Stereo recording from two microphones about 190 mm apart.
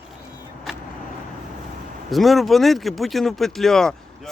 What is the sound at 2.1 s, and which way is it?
Speech, centre (ahead or behind).